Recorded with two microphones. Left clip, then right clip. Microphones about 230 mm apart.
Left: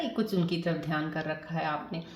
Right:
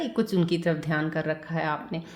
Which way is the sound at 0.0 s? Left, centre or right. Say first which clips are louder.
Right 4 dB; right.